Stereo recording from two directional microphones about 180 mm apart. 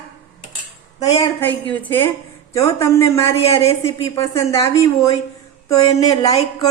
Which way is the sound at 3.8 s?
15° left (ahead or behind).